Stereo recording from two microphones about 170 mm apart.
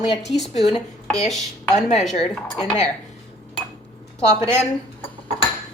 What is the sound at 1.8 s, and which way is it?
Speech, 45° left (ahead or behind).